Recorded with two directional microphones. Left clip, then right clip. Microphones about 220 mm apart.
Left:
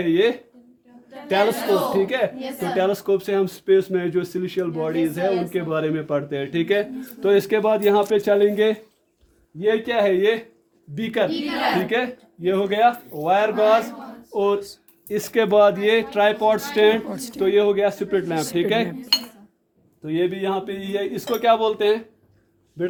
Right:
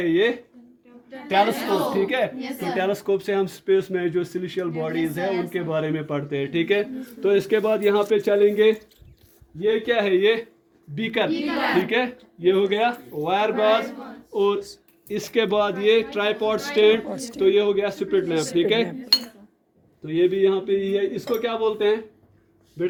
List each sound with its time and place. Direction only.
0.0 s speech: 20° left (ahead or behind)
1.9 s speech: 20° left (ahead or behind); by 17.0 s 40° left (ahead or behind)
17.1 s speech: 20° left (ahead or behind)
17.3 s speech: 40° left (ahead or behind)
20.1 s speech: 35° left (ahead or behind)